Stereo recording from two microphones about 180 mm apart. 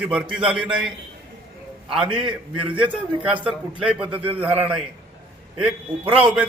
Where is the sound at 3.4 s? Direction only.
5° right (ahead or behind).